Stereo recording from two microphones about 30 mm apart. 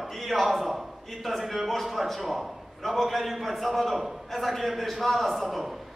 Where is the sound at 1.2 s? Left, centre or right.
Centre.